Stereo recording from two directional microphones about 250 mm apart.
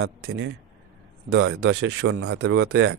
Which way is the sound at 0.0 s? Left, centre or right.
Right.